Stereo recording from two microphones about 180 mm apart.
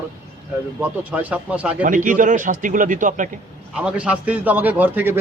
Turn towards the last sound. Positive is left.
turn(degrees=-10)  # may be behind; listen again after turning